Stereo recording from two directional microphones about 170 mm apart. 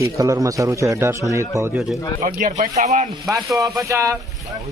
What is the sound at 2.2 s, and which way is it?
Speech, 45° right (ahead or behind).